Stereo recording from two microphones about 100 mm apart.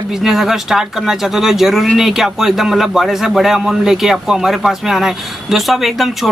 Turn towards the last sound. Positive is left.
turn(degrees=0)  # may be behind; listen again after turning